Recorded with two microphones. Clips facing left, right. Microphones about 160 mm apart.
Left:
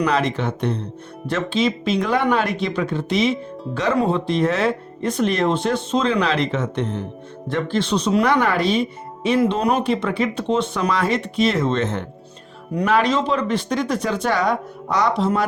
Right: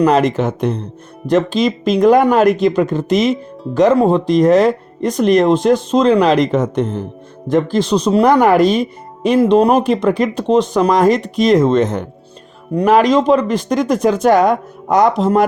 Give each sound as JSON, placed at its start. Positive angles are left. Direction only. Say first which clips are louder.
{"t": 0.0, "sound": "speech", "louder": "right 7 dB", "side_deg": -40}